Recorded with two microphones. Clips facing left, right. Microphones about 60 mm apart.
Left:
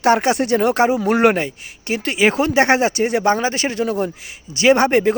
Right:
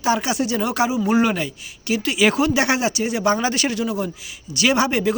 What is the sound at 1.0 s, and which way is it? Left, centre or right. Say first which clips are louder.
Speech: left 4 dB; left.